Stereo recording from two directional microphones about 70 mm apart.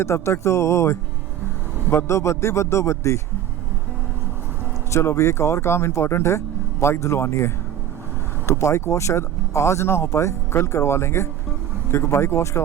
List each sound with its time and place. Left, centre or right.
0.0 s speech: left
4.9 s speech: left